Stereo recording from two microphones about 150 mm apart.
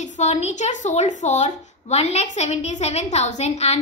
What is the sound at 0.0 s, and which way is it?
A woman's voice, 50° left (ahead or behind).